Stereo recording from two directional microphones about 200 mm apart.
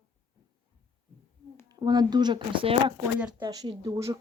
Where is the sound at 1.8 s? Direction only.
20° right (ahead or behind).